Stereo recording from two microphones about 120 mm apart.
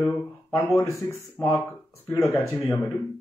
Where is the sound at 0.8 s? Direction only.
25° left (ahead or behind).